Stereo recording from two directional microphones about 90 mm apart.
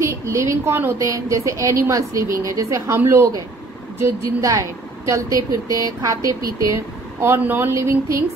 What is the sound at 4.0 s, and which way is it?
Speech, 35° right (ahead or behind).